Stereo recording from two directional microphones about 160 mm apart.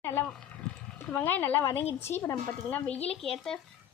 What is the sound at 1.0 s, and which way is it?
A woman's voice, 10° left (ahead or behind).